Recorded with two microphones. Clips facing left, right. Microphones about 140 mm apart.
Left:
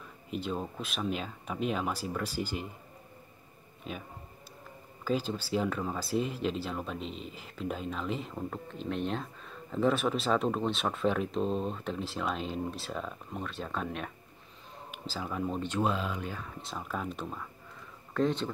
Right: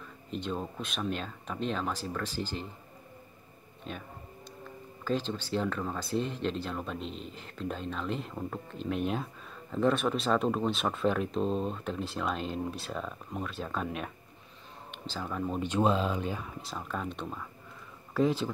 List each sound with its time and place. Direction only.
0.3 s speech: 5° left (ahead or behind)
3.9 s speech: 5° left (ahead or behind)
5.0 s speech: 5° left (ahead or behind)
15.1 s speech: 5° left (ahead or behind)
15.6 s speech: 20° right (ahead or behind)
16.6 s speech: centre (ahead or behind)